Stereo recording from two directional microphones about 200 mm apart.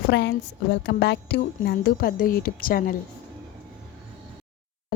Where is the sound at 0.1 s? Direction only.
60° left (ahead or behind).